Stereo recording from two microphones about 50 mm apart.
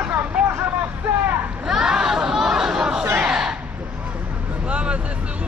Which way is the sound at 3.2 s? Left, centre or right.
Centre.